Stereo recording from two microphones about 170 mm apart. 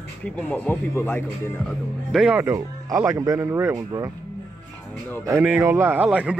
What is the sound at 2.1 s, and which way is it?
Speech, 5° right (ahead or behind).